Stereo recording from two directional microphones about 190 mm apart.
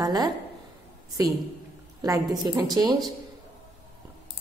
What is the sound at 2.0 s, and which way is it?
A woman's voice, 20° right (ahead or behind).